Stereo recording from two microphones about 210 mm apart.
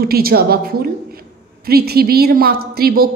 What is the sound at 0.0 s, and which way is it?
A woman's voice, 45° right (ahead or behind).